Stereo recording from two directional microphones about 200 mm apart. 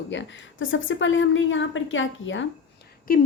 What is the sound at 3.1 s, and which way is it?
Speech, 45° left (ahead or behind).